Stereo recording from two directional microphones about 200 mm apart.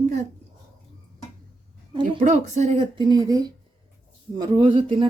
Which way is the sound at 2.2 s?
35° right (ahead or behind).